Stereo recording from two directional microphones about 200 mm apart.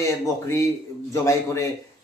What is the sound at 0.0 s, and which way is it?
A man's voice, 15° left (ahead or behind).